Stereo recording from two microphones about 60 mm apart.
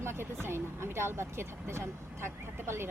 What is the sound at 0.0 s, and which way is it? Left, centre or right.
Speech, right.